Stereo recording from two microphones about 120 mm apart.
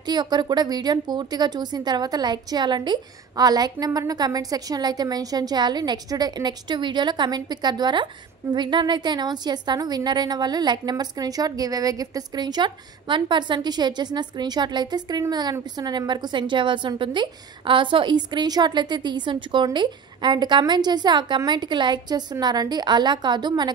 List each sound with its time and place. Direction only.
0.0 s a woman's voice: 35° right (ahead or behind)